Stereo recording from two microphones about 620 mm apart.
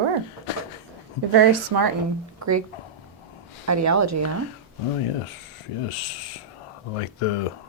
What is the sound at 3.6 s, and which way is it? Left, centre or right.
Speech, right.